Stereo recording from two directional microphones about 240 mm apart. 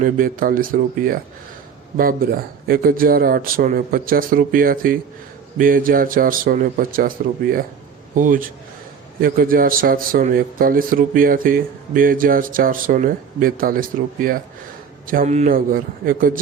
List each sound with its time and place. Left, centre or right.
0.0 s speech: right
8.1 s speech: right